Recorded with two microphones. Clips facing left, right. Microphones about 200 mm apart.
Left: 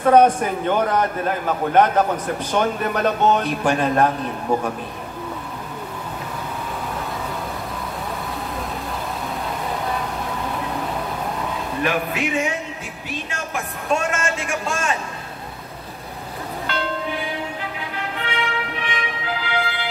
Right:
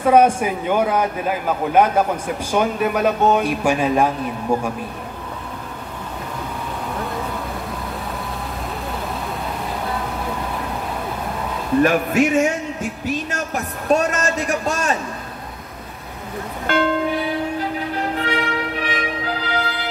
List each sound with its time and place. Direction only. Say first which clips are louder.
0.0 s a man's voice: even; 10° right (ahead or behind)
11.8 s a man's voice: right 7 dB; 45° right (ahead or behind)
16.7 s music: right 9 dB; 50° right (ahead or behind)
17.9 s music: right 4 dB; 40° right (ahead or behind)